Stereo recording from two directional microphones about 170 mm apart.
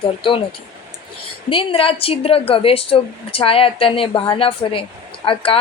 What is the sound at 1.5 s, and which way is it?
A woman's voice, 30° left (ahead or behind).